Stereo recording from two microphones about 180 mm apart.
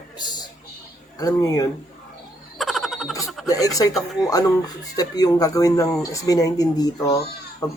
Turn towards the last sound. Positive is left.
turn(degrees=20)  # may be behind; listen again after turning